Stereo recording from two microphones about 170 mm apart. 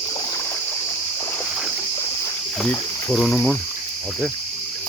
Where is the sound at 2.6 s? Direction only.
5° left (ahead or behind).